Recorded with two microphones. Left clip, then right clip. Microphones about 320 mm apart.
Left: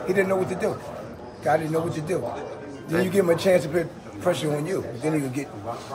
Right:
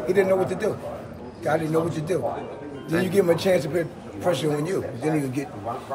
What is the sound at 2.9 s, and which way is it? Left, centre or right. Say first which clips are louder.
A man's voice: even; centre.